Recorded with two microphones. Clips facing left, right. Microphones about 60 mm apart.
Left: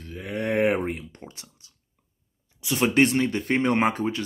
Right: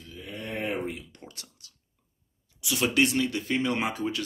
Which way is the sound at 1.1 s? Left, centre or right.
Left.